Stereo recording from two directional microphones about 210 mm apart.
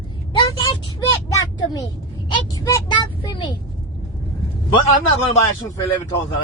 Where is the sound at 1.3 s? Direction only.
20° left (ahead or behind).